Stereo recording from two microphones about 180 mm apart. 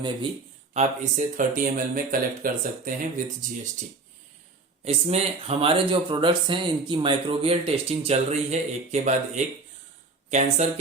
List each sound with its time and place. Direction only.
0.7 s speech: 40° right (ahead or behind)
4.9 s speech: 35° right (ahead or behind)